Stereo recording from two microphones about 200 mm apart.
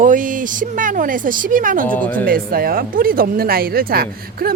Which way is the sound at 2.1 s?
45° right (ahead or behind).